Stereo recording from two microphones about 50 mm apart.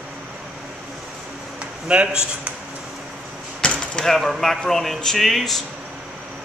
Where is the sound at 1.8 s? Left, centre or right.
Centre.